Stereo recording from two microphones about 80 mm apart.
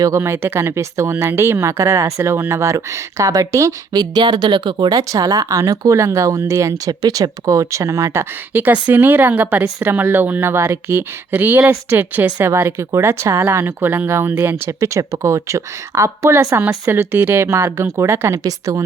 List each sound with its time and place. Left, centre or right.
0.0 s speech: right
3.9 s speech: right
4.9 s speech: right
8.6 s speech: right
10.5 s speech: right
14.8 s speech: right
16.9 s speech: right